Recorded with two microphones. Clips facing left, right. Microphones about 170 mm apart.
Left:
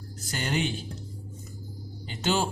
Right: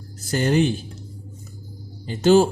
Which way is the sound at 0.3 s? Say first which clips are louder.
Right 10 dB; 40° right (ahead or behind).